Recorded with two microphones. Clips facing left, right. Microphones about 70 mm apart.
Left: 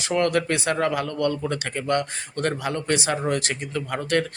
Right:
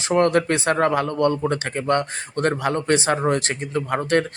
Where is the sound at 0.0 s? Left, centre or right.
Right.